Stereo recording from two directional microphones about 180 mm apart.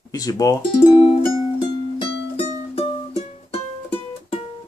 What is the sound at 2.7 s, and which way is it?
Music, 35° left (ahead or behind).